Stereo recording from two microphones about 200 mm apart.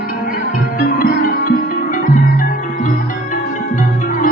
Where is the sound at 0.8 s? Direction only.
45° left (ahead or behind).